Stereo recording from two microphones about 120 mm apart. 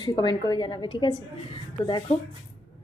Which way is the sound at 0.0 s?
40° left (ahead or behind).